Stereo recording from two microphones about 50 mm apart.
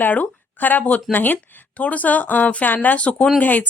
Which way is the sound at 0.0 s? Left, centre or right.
Left.